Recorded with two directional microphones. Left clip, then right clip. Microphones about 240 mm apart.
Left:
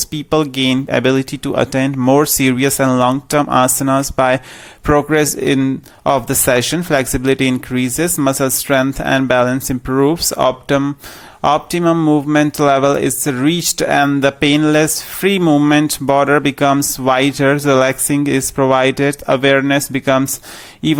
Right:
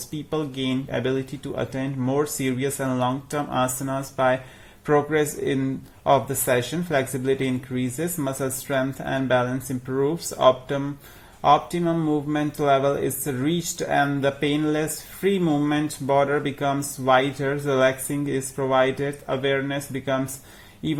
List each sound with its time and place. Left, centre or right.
0.1 s speech: left